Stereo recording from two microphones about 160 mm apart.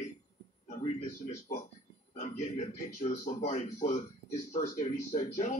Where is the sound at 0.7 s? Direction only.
45° left (ahead or behind).